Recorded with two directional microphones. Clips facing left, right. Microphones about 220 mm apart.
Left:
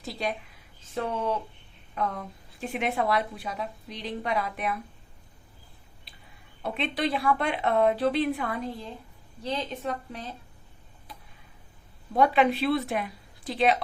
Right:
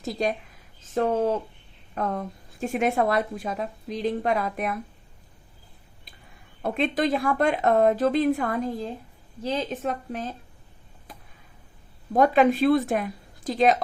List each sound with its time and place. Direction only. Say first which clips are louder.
0.0 s a woman's voice: right 5 dB; 45° right (ahead or behind)
6.6 s a woman's voice: right 5 dB; 45° right (ahead or behind)
12.1 s a woman's voice: right 4 dB; 45° right (ahead or behind)